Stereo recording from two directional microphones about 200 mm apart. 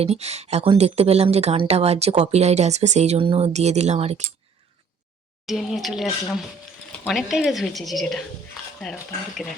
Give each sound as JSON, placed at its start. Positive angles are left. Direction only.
{"t": 0.0, "sound": "speech", "side_deg": -30}
{"t": 5.5, "sound": "a woman's voice", "side_deg": 0}
{"t": 7.1, "sound": "a woman's voice", "side_deg": 0}